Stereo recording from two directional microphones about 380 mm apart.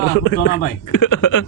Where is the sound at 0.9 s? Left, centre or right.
Left.